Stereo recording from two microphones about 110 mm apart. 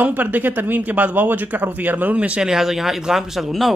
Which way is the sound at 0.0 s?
15° right (ahead or behind).